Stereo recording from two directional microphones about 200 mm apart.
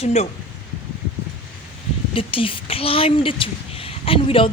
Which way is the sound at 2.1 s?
25° left (ahead or behind).